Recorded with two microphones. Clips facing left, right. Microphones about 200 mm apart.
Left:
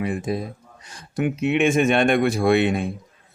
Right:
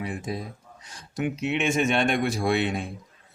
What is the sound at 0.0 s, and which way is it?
Speech, 60° left (ahead or behind).